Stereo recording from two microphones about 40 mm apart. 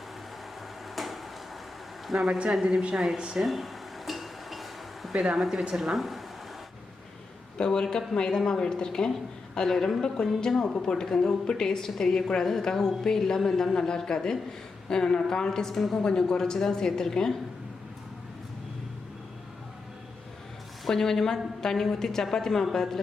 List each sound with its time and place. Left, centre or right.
0.9 s a sound: centre
2.1 s speech: right
2.5 s speech: centre
3.4 s a sound: centre
5.3 s speech: centre
7.6 s a woman's voice: centre
20.8 s a woman's voice: centre